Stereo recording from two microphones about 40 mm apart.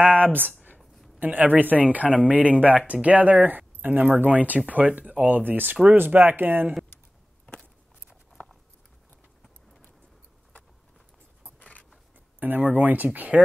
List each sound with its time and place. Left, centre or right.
0.7 s a sound: centre
1.2 s speech: right
5.3 s speech: right
8.4 s patter: left
12.4 s speech: right